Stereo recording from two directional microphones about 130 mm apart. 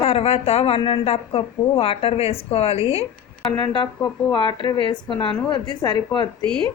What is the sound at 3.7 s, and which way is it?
A woman's voice, 35° left (ahead or behind).